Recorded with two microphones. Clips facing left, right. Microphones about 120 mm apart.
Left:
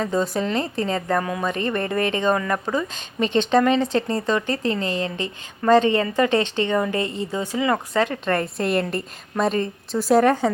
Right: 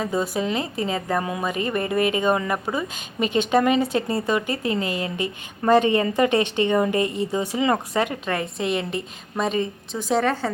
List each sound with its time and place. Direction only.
0.0 s speech: 5° right (ahead or behind)
8.2 s a woman's voice: 5° right (ahead or behind); by 10.5 s 15° left (ahead or behind)